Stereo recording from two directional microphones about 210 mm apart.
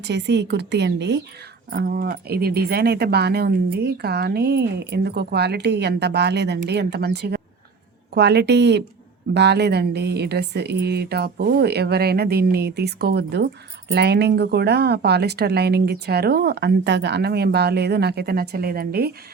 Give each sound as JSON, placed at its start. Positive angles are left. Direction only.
{"t": 0.0, "sound": "a woman's voice", "side_deg": -55}